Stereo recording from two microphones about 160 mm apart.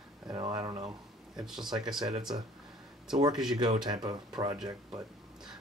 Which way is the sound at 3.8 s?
25° right (ahead or behind).